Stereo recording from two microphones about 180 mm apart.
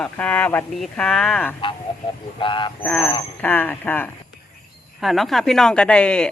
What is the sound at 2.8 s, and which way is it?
Speech, 5° left (ahead or behind).